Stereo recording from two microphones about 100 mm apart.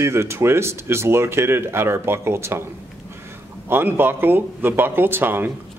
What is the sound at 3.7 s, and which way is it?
Speech, 20° right (ahead or behind).